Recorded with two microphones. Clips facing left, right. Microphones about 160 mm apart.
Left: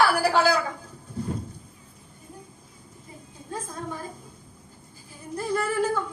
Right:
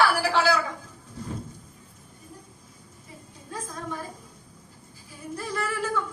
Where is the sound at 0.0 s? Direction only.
30° left (ahead or behind).